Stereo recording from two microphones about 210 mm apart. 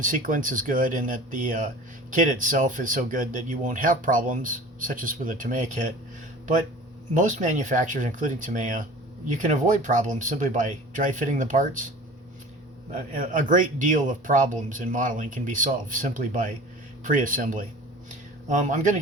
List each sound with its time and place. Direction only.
0.0 s speech: 40° right (ahead or behind)
7.1 s speech: 35° right (ahead or behind)
12.9 s speech: 40° right (ahead or behind)
18.1 s a sound: 35° right (ahead or behind)